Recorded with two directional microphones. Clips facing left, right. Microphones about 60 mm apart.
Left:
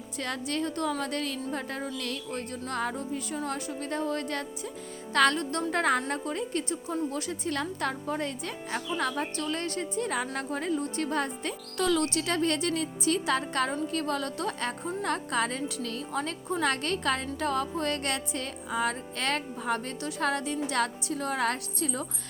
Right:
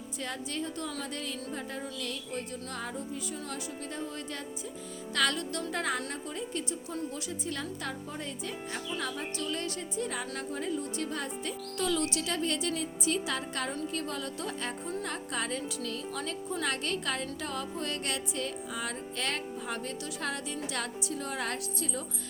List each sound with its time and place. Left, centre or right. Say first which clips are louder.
0.2 s a woman's voice: left 5 dB; left
5.1 s a woman's voice: left 6 dB; left